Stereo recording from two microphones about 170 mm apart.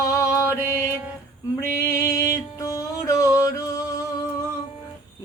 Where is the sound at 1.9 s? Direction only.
20° left (ahead or behind).